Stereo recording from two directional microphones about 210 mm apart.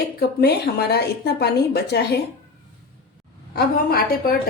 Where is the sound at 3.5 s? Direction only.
45° left (ahead or behind).